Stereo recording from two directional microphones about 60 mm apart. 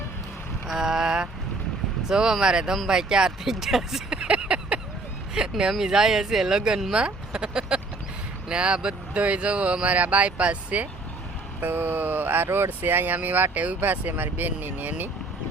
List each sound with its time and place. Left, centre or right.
0.7 s boat: centre
2.0 s speech: centre
4.2 s a sound: centre
5.3 s speech: centre
11.6 s speech: right